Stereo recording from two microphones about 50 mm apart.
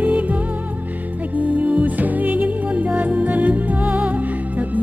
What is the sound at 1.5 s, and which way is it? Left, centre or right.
Music, right.